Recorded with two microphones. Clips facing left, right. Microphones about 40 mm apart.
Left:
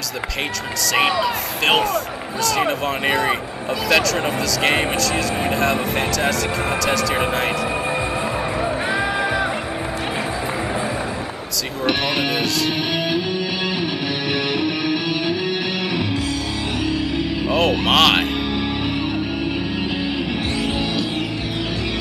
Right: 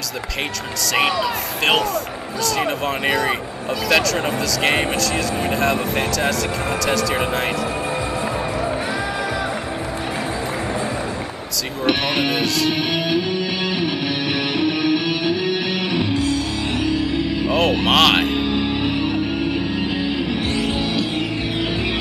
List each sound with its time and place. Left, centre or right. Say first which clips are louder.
0.9 s speech: left 1 dB; centre
11.8 s speech: right 1 dB; centre
14.6 s music: right 2 dB; centre
20.5 s music: even; centre